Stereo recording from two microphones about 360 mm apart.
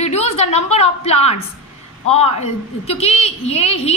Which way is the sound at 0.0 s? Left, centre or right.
Centre.